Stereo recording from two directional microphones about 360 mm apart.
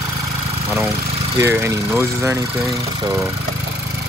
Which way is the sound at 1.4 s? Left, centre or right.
Centre.